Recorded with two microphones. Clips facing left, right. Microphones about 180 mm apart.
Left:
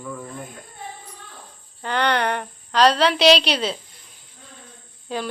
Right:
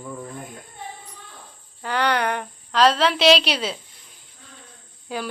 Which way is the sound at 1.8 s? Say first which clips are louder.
Left 1 dB; 5° right (ahead or behind).